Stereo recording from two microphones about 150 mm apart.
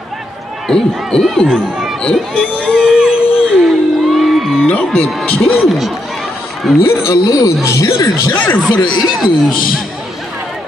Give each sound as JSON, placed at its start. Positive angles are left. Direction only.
{"t": 0.7, "sound": "basketball bounce", "side_deg": 5}
{"t": 4.6, "sound": "speech", "side_deg": 10}
{"t": 7.1, "sound": "speech", "side_deg": 20}
{"t": 8.8, "sound": "speech", "side_deg": 30}
{"t": 9.1, "sound": "speech", "side_deg": -5}